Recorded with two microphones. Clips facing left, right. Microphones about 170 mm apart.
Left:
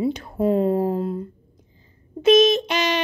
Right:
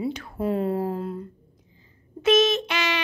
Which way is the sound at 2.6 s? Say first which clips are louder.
Left 5 dB; 40° left (ahead or behind).